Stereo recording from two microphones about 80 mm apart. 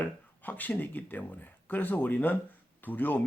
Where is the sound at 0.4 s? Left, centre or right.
Left.